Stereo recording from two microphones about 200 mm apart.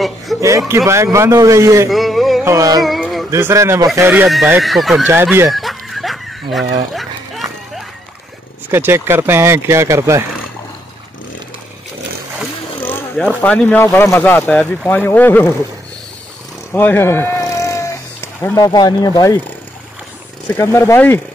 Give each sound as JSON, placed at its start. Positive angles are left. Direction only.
{"t": 0.4, "sound": "speech", "side_deg": -15}
{"t": 1.9, "sound": "a sound", "side_deg": 0}
{"t": 2.4, "sound": "speech", "side_deg": -15}
{"t": 2.8, "sound": "a sound", "side_deg": 0}
{"t": 3.3, "sound": "speech", "side_deg": -15}
{"t": 5.0, "sound": "speech", "side_deg": -10}
{"t": 5.5, "sound": "chicken", "side_deg": 0}
{"t": 6.9, "sound": "dog", "side_deg": 0}
{"t": 8.6, "sound": "speech", "side_deg": -10}
{"t": 13.1, "sound": "speech", "side_deg": -5}
{"t": 13.4, "sound": "speech", "side_deg": 5}
{"t": 16.7, "sound": "cat", "side_deg": 10}
{"t": 20.4, "sound": "speech", "side_deg": 15}